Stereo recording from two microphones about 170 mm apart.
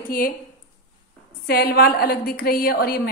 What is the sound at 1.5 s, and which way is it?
A woman's voice, 65° left (ahead or behind).